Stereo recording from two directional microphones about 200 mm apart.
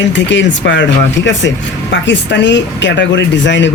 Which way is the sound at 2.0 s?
60° left (ahead or behind).